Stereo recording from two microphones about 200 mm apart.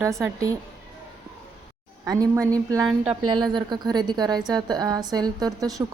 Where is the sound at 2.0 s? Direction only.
15° right (ahead or behind).